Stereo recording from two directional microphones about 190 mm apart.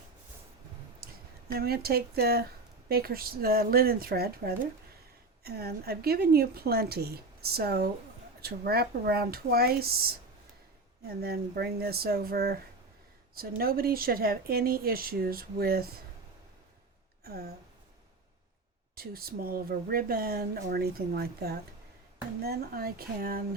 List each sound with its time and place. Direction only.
1.5 s a woman's voice: 55° right (ahead or behind)
17.2 s a sound: 55° right (ahead or behind)
18.9 s speech: 50° right (ahead or behind)